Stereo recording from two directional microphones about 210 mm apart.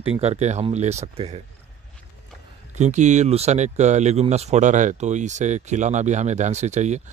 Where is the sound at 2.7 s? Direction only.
35° right (ahead or behind).